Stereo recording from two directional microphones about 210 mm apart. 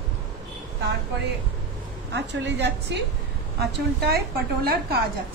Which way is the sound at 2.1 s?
55° right (ahead or behind).